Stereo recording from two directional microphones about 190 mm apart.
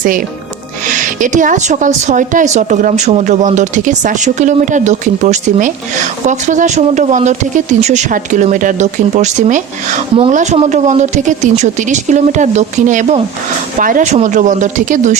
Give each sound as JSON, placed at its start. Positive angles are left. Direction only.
{"t": 0.0, "sound": "speech", "side_deg": -45}